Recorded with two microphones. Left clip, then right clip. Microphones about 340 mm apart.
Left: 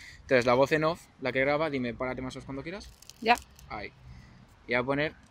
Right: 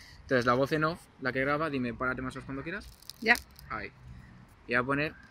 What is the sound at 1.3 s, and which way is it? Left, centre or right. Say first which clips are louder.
Speech: left 3 dB; centre.